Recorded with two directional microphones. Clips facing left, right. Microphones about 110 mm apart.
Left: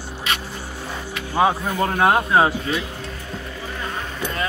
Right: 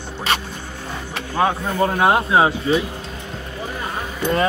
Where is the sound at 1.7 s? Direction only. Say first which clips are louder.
Right 3 dB; 10° right (ahead or behind).